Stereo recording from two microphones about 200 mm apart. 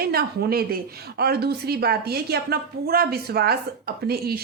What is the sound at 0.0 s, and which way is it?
A woman's voice, 50° right (ahead or behind).